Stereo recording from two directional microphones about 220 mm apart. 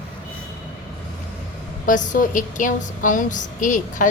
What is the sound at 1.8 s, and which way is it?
A woman's voice, 35° left (ahead or behind).